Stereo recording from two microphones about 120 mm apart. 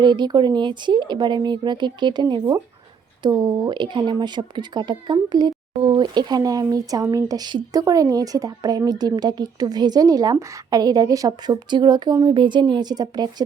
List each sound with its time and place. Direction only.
0.0 s a woman's voice: 40° right (ahead or behind)
5.8 s speech: 55° right (ahead or behind)
6.1 s a woman's voice: 35° right (ahead or behind)